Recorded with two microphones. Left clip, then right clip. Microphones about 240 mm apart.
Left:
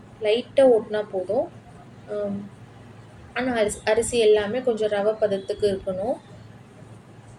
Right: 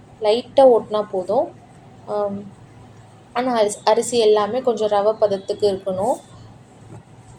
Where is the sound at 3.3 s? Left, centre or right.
Right.